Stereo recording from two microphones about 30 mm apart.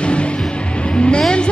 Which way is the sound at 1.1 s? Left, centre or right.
Left.